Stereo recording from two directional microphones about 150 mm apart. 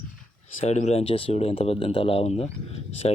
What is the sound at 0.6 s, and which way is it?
Speech, 45° left (ahead or behind).